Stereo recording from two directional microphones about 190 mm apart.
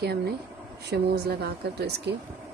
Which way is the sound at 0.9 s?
55° right (ahead or behind).